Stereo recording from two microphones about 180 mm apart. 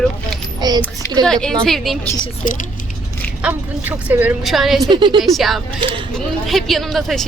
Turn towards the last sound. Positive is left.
turn(degrees=0)  # may be behind; listen again after turning